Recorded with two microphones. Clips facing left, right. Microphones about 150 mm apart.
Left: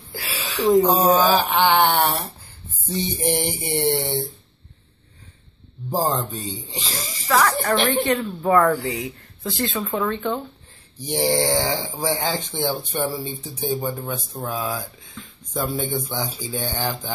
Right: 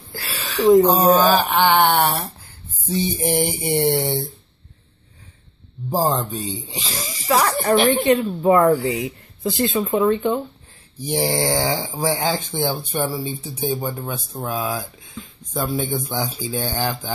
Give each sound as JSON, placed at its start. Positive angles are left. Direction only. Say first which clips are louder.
{"t": 0.1, "sound": "a sound", "louder": "right 1 dB", "side_deg": 10}
{"t": 0.7, "sound": "speech", "louder": "right 3 dB", "side_deg": 0}
{"t": 5.9, "sound": "speech", "louder": "right 2 dB", "side_deg": -10}
{"t": 7.2, "sound": "speech", "louder": "right 2 dB", "side_deg": -20}